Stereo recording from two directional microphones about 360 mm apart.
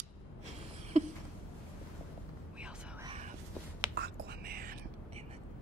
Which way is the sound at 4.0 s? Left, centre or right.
Right.